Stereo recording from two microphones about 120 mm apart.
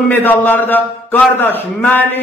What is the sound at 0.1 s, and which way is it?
A man's voice, 15° left (ahead or behind).